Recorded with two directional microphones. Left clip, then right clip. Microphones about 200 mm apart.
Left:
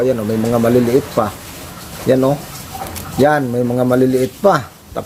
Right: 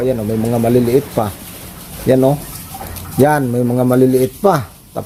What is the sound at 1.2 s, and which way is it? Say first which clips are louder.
Speech: left 1 dB; centre (ahead or behind).